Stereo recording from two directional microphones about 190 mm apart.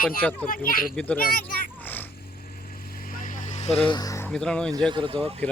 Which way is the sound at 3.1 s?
45° left (ahead or behind).